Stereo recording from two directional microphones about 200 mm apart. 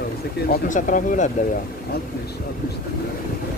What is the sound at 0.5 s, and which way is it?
Speech, 40° left (ahead or behind).